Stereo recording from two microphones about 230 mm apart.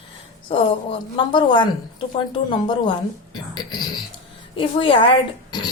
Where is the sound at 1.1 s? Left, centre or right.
Left.